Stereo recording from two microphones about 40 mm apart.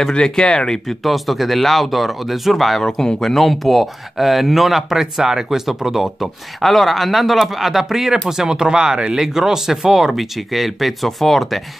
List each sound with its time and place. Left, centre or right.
0.1 s speech: left
0.8 s speech: centre
2.8 s speech: centre
3.3 s speech: centre